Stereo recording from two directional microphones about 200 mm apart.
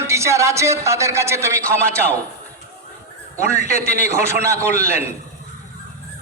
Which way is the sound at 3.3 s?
35° left (ahead or behind).